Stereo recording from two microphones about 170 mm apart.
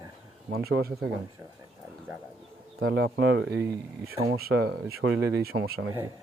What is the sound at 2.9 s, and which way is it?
Speech, 80° right.